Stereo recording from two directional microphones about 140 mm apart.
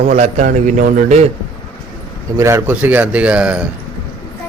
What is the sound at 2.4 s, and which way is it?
A man's voice, 20° right (ahead or behind).